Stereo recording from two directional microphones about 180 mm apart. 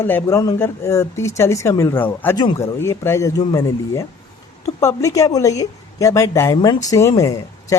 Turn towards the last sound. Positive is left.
turn(degrees=20)  # may be behind; listen again after turning